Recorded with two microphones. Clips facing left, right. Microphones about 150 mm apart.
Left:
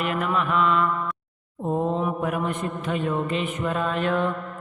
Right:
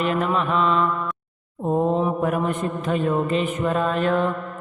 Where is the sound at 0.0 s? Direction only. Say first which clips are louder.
Right 3 dB; 30° right (ahead or behind).